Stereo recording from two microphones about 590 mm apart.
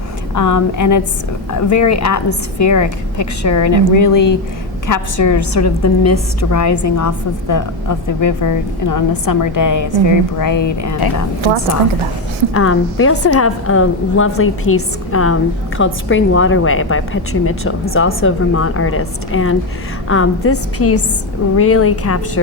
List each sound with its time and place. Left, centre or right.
0.3 s a woman's voice: left
12.5 s a woman's voice: left